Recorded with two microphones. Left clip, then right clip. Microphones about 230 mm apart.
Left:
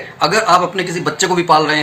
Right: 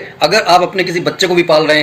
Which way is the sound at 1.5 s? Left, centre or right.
Left.